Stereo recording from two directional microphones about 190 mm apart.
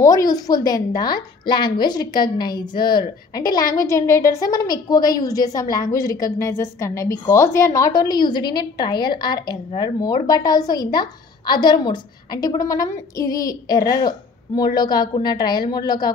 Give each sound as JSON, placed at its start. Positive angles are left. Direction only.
{"t": 0.0, "sound": "a woman's voice", "side_deg": 20}